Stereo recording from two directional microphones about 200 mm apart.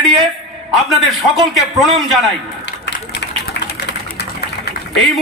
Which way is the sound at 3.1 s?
60° left (ahead or behind).